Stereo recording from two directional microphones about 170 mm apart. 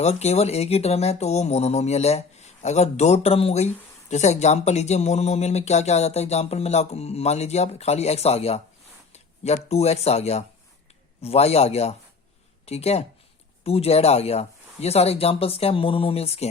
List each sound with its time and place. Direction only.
0.0 s speech: 40° left (ahead or behind)